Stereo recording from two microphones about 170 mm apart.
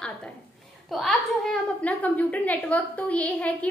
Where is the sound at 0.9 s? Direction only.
5° left (ahead or behind).